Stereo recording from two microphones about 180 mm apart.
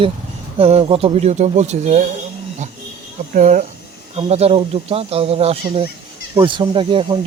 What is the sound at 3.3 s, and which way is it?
Speech, 45° right (ahead or behind).